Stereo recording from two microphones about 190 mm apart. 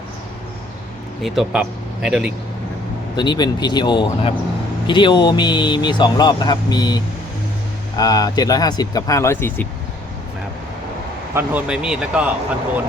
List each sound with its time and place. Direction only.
1.2 s speech: centre (ahead or behind)
3.2 s speech: 20° left (ahead or behind)
11.3 s speech: 5° right (ahead or behind)